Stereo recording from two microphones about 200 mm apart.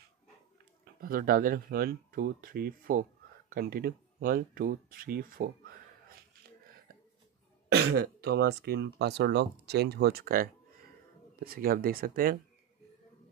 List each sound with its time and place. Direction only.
1.0 s speech: 45° right (ahead or behind)
7.7 s speech: 55° right (ahead or behind)